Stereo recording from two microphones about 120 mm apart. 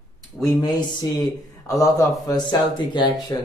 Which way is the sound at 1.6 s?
30° left (ahead or behind).